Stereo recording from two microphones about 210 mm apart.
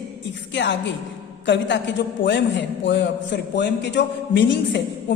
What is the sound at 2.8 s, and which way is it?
A man's voice, 60° left (ahead or behind).